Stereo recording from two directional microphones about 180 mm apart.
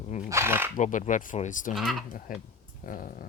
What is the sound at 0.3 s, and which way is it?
Speech, 15° right (ahead or behind).